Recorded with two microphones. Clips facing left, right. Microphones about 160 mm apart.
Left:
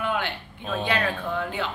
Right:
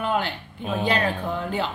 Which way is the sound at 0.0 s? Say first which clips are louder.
Right 3 dB; 35° right (ahead or behind).